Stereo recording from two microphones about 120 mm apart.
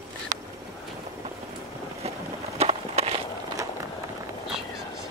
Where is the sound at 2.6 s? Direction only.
60° right (ahead or behind).